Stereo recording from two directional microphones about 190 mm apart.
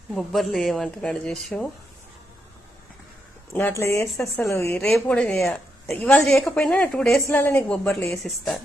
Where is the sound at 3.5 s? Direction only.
15° left (ahead or behind).